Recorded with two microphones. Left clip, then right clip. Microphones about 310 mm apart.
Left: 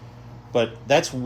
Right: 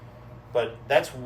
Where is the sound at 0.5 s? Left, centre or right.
Left.